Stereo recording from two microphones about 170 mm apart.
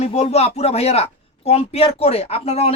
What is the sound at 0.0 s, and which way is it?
Speech, 40° left (ahead or behind).